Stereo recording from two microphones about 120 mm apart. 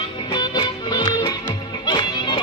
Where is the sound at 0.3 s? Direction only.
35° left (ahead or behind).